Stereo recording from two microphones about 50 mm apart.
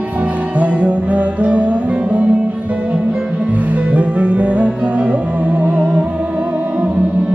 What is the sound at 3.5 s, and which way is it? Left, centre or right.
Music, right.